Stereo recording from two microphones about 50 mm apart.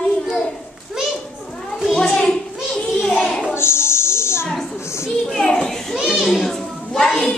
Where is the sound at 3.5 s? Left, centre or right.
Left.